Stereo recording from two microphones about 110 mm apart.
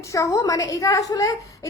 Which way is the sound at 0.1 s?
30° left (ahead or behind).